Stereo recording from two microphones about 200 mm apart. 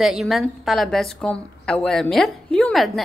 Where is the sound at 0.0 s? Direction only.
Centre (ahead or behind).